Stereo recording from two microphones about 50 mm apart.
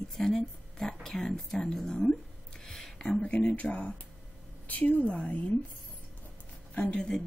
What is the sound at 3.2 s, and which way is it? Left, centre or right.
Speech, left.